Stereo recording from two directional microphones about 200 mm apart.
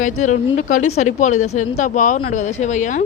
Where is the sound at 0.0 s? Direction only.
40° left (ahead or behind).